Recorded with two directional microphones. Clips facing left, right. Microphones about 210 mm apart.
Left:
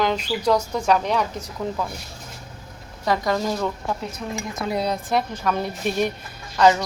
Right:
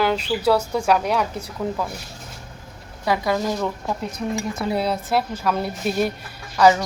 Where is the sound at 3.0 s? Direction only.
5° right (ahead or behind).